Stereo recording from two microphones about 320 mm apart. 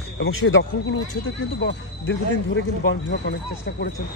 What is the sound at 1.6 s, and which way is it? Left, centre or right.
Speech, left.